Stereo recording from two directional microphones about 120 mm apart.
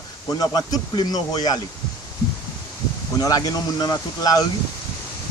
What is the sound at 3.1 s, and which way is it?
Speech, 30° left (ahead or behind).